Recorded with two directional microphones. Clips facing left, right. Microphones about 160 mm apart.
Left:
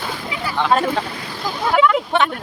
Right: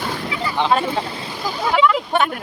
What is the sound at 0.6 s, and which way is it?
Speech, 15° right (ahead or behind).